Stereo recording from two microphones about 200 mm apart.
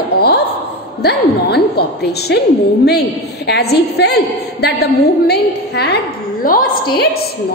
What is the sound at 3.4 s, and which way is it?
A woman's voice, 55° left (ahead or behind).